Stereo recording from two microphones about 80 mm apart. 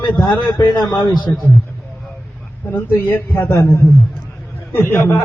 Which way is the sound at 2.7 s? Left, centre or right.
Left.